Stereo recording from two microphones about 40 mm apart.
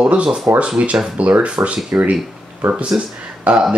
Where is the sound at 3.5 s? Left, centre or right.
Right.